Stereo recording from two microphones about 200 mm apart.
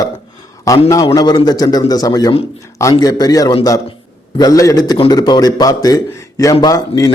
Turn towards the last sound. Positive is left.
turn(degrees=15)  # may be behind; listen again after turning